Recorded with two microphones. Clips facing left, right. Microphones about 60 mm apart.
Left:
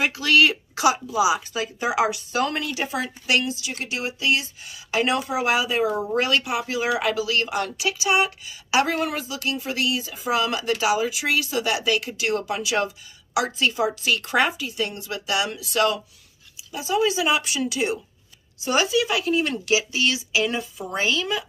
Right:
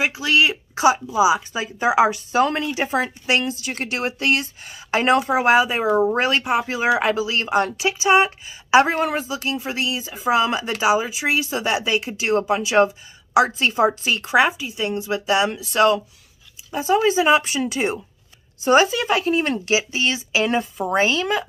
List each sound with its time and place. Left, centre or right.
0.1 s speech: right
3.5 s a woman's voice: right
14.2 s a woman's voice: centre; by 21.5 s right